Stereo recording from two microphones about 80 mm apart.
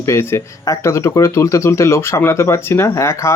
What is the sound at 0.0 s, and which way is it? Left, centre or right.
Speech, left.